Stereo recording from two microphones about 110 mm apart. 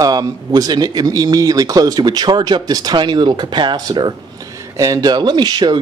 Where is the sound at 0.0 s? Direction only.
35° right (ahead or behind).